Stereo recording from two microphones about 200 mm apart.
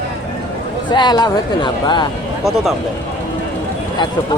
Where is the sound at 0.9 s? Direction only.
20° left (ahead or behind).